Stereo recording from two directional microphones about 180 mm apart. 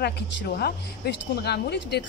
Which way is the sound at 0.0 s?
65° left (ahead or behind).